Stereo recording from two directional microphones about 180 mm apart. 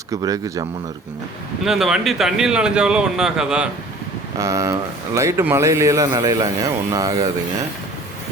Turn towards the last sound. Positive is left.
turn(degrees=-20)  # may be behind; listen again after turning